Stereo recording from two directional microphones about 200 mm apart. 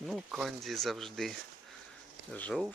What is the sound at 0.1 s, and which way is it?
Speech, centre (ahead or behind).